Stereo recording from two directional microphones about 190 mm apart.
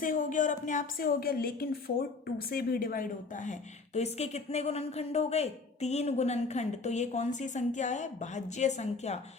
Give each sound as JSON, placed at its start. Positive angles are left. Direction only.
{"t": 0.0, "sound": "a woman's voice", "side_deg": 45}